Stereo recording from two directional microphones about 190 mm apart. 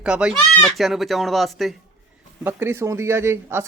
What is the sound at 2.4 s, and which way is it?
Speech, 10° right (ahead or behind).